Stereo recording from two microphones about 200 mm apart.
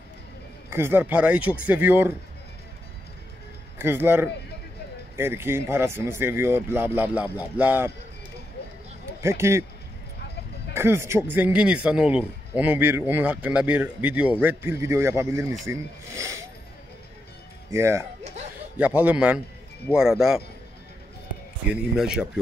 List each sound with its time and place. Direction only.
0.7 s a man's voice: 10° right (ahead or behind)
3.7 s a man's voice: 10° right (ahead or behind)
9.2 s a man's voice: 15° right (ahead or behind)
10.7 s a man's voice: 10° right (ahead or behind)
17.6 s a man's voice: 15° right (ahead or behind)
18.2 s a sound: 35° right (ahead or behind)
18.8 s a man's voice: 5° right (ahead or behind)
21.6 s speech: 5° right (ahead or behind)